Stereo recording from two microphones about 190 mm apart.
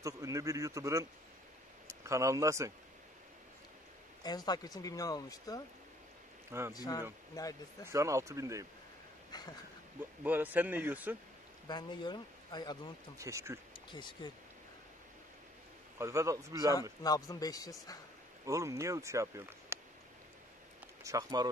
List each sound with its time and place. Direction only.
0.0 s speech: 15° right (ahead or behind)
4.2 s speech: 20° left (ahead or behind)
6.7 s speech: 20° left (ahead or behind)
7.8 s speech: 15° right (ahead or behind)
9.3 s speech: 20° left (ahead or behind)
10.2 s speech: 10° right (ahead or behind)
11.6 s speech: 25° left (ahead or behind)
13.2 s speech: 15° right (ahead or behind)
13.9 s speech: 25° left (ahead or behind)
16.0 s speech: 15° right (ahead or behind)
17.0 s speech: 20° left (ahead or behind)
18.4 s speech: 15° right (ahead or behind)
21.0 s speech: 15° right (ahead or behind)